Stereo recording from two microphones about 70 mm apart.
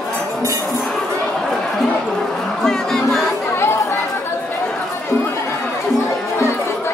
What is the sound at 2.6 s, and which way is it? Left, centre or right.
Music, centre.